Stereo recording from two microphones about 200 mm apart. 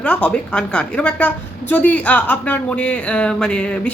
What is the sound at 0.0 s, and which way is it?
A woman's voice, 5° left (ahead or behind).